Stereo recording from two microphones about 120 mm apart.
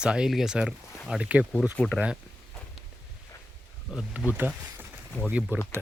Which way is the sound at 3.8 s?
5° right (ahead or behind).